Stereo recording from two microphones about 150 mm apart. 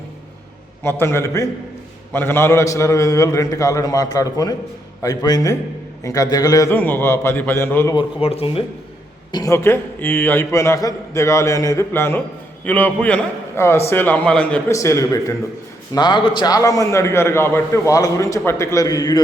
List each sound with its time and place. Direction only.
0.8 s a man's voice: 15° left (ahead or behind)
7.9 s speech: 40° left (ahead or behind)
9.3 s a man's voice: 20° left (ahead or behind)
14.7 s a man's voice: 20° left (ahead or behind)